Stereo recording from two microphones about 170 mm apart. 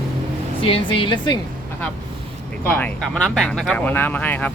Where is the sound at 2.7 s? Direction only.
10° left (ahead or behind).